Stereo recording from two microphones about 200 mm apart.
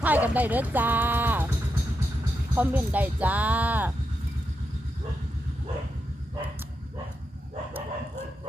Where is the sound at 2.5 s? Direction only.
10° right (ahead or behind).